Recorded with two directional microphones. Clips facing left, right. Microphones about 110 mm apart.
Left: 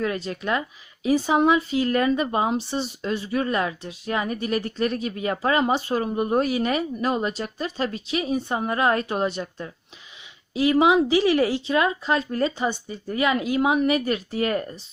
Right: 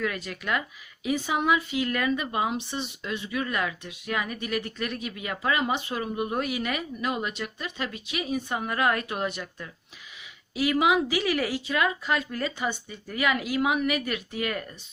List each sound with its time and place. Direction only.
0.0 s speech: 30° left (ahead or behind)